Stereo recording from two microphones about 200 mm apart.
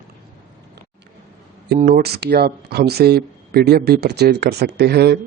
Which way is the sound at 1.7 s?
50° right (ahead or behind).